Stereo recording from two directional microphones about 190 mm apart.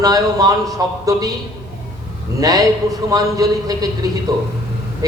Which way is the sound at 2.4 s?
20° right (ahead or behind).